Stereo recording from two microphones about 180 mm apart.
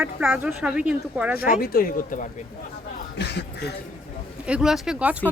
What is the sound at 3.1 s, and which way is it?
Speech, 70° left (ahead or behind).